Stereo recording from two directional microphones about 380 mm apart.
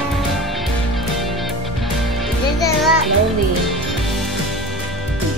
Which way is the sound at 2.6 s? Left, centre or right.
Centre.